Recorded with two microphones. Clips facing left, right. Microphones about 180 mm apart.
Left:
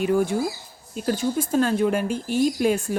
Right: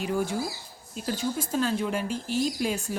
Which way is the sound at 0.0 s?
55° left (ahead or behind).